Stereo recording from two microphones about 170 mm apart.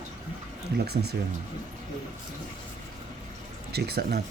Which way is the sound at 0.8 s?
70° right (ahead or behind).